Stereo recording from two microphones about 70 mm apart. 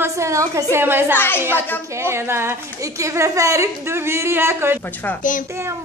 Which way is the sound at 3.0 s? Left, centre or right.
Right.